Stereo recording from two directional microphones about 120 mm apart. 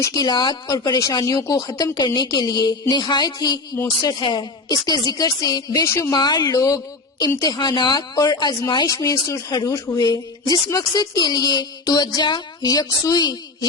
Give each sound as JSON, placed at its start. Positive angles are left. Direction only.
{"t": 0.0, "sound": "a woman's voice", "side_deg": 30}
{"t": 0.7, "sound": "a woman's voice", "side_deg": 25}
{"t": 5.8, "sound": "a woman's voice", "side_deg": 20}
{"t": 6.1, "sound": "a woman's voice", "side_deg": 35}